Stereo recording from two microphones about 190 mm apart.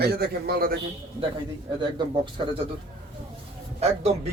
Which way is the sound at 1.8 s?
25° right (ahead or behind).